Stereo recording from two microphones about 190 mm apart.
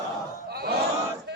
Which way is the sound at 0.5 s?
55° right (ahead or behind).